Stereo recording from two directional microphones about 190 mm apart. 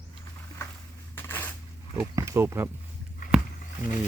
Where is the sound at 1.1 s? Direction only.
10° left (ahead or behind).